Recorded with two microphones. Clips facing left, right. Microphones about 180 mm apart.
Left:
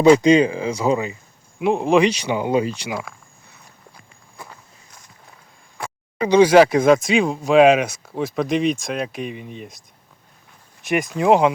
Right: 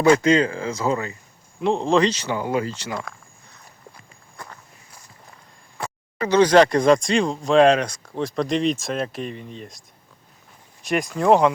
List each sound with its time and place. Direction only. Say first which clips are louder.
0.0 s speech: left 4 dB; 15° left (ahead or behind)
5.7 s a sound: even; centre (ahead or behind)
6.2 s speech: left 3 dB; 10° left (ahead or behind)
10.8 s speech: left 1 dB; centre (ahead or behind)